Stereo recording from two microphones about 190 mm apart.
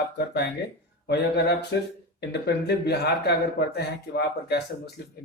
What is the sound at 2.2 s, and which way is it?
Speech, 60° left (ahead or behind).